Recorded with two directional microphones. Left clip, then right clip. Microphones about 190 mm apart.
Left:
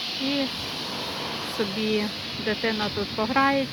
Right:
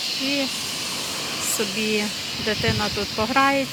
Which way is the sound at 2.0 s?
5° right (ahead or behind).